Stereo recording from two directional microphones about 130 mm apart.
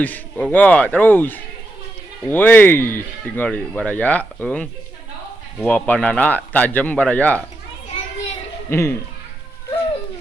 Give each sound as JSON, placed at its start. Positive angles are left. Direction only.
{"t": 0.0, "sound": "speech", "side_deg": 10}
{"t": 8.7, "sound": "speech", "side_deg": 20}